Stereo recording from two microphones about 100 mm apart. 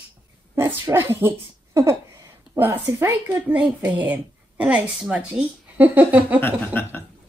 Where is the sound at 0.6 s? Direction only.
25° right (ahead or behind).